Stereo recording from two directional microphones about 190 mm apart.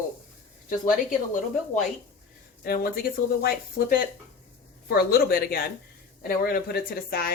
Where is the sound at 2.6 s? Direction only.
50° left (ahead or behind).